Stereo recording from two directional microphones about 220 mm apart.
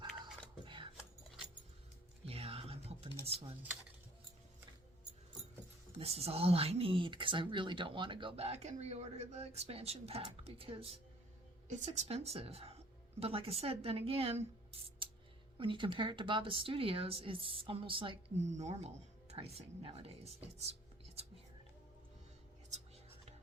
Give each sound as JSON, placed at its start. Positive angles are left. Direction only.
{"t": 0.6, "sound": "a sound", "side_deg": -20}
{"t": 2.2, "sound": "music", "side_deg": -25}
{"t": 3.2, "sound": "speech", "side_deg": -25}
{"t": 6.0, "sound": "speech", "side_deg": -25}
{"t": 20.4, "sound": "whispering", "side_deg": -30}